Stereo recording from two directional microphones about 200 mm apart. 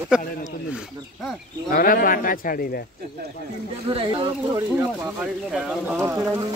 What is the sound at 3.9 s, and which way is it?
Speech, 25° right (ahead or behind).